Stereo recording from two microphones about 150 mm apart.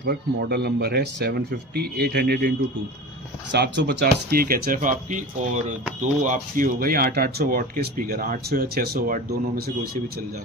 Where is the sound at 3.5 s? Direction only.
90° right.